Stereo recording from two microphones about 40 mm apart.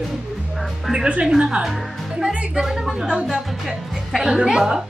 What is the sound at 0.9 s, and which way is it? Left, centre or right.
A woman's voice, right.